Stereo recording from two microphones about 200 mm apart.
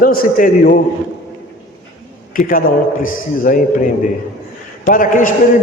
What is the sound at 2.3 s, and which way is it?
A man's voice, 45° left (ahead or behind).